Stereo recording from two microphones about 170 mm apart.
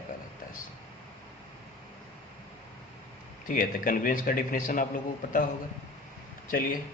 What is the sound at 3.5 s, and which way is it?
Speech, 55° left (ahead or behind).